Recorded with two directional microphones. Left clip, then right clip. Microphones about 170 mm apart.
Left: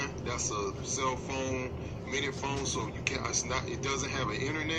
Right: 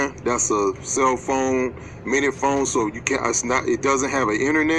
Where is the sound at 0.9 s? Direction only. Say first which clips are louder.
Right 14 dB; 40° right (ahead or behind).